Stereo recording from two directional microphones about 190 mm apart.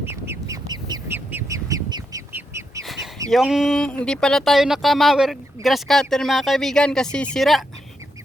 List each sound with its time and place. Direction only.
0.0 s bird: 10° right (ahead or behind)
2.8 s chicken: centre (ahead or behind)
3.2 s speech: centre (ahead or behind)